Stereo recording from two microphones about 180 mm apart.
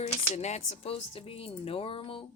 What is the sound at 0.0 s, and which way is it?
A woman's voice, 35° left (ahead or behind).